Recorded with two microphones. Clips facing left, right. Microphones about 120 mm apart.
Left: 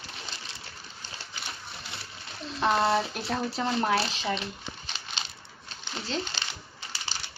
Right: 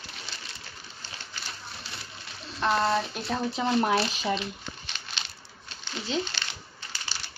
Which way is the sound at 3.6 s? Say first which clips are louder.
Right 3 dB; 15° right (ahead or behind).